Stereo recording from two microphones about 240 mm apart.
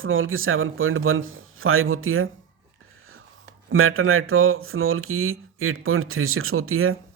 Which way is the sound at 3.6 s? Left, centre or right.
Right.